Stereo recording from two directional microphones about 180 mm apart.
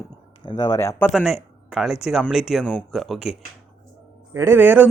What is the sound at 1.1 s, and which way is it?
Speech, centre (ahead or behind).